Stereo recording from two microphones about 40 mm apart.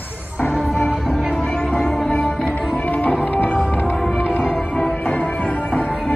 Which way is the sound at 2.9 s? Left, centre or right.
Left.